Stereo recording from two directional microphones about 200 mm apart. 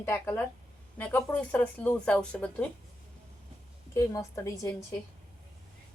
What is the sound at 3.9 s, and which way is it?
Speech, 15° left (ahead or behind).